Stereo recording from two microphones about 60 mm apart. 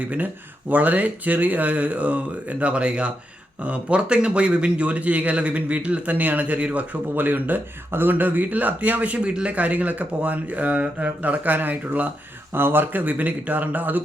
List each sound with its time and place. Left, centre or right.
0.7 s a man's voice: right